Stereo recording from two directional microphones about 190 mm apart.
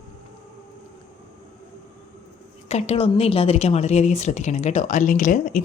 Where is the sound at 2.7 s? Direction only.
35° left (ahead or behind).